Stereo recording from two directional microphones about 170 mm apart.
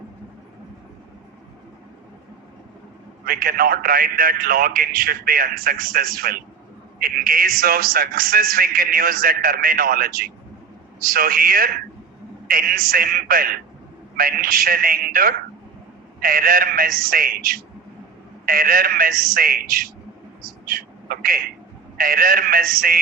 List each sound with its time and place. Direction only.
3.2 s a man's voice: 60° right (ahead or behind)